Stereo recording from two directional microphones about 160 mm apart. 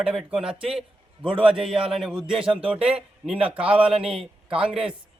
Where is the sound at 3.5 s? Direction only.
10° right (ahead or behind).